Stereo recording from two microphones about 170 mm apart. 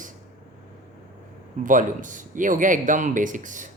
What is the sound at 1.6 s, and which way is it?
Speech, 50° right (ahead or behind).